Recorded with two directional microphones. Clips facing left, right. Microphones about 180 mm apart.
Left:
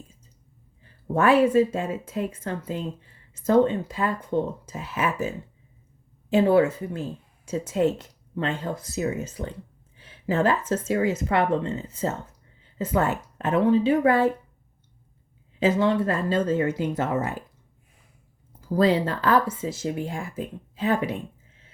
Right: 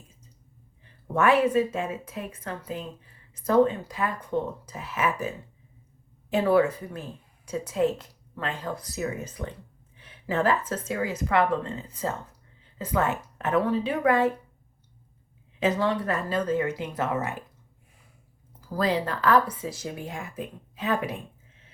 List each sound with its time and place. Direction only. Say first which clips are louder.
1.1 s speech: left 3 dB; 30° left (ahead or behind)
6.3 s speech: left 3 dB; 25° left (ahead or behind)
15.6 s speech: left 4 dB; 25° left (ahead or behind)
18.8 s speech: left 5 dB; 25° left (ahead or behind)